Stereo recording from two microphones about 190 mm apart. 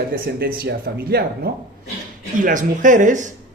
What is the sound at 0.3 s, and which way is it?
Speech, 55° right (ahead or behind).